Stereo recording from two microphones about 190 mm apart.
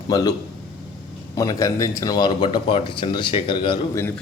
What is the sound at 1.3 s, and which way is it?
Speech, 15° left (ahead or behind).